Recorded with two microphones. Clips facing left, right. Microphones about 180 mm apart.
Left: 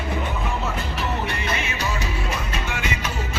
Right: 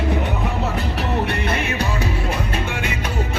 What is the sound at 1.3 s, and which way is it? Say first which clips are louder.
Music: right 5 dB; 60° right (ahead or behind).